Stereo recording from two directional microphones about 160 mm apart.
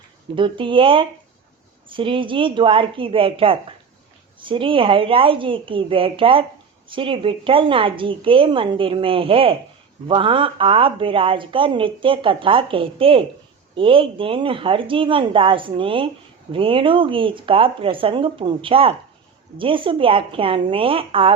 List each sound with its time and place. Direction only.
0.3 s a woman's voice: 30° right (ahead or behind)